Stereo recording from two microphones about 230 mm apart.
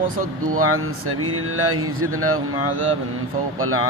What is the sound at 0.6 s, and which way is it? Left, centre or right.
Speech, right.